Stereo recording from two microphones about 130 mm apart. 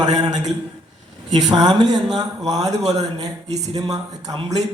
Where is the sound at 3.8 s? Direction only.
30° right (ahead or behind).